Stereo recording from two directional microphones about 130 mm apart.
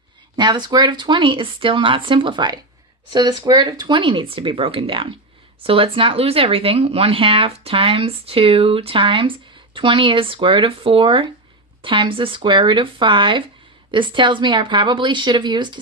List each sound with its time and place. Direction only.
0.3 s speech: 35° right (ahead or behind)